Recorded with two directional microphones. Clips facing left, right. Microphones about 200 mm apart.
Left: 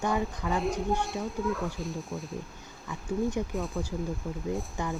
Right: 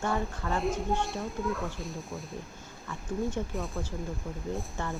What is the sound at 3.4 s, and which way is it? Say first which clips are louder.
Speech: left 2 dB; 10° left (ahead or behind).